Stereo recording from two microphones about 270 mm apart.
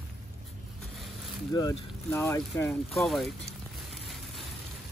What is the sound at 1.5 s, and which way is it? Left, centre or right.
Speech, centre.